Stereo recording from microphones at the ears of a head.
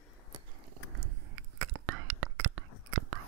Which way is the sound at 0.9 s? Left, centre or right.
Right.